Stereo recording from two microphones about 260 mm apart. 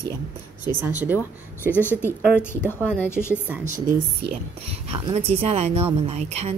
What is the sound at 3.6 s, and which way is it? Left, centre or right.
A woman's voice, right.